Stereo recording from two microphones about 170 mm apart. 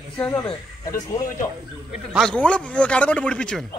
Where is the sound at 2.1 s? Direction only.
5° left (ahead or behind).